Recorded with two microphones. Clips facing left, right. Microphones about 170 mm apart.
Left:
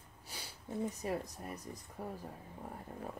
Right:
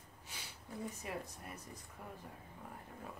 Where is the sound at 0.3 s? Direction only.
35° left (ahead or behind).